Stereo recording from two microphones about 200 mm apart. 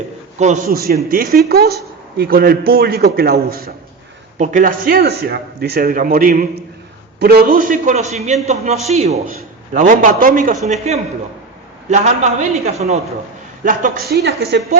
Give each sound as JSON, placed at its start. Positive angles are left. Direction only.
{"t": 0.3, "sound": "a man's voice", "side_deg": -35}
{"t": 0.8, "sound": "a man's voice", "side_deg": -50}
{"t": 10.7, "sound": "a man's voice", "side_deg": -30}
{"t": 13.7, "sound": "a man's voice", "side_deg": -45}